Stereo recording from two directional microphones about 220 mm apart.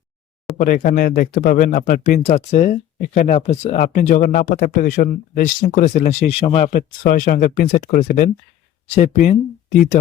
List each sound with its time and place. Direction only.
0.6 s speech: 35° left (ahead or behind)